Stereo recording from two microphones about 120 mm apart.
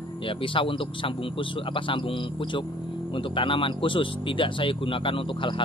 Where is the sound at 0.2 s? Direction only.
45° left (ahead or behind).